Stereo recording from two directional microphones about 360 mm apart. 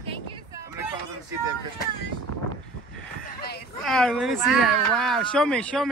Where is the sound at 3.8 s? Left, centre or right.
Centre.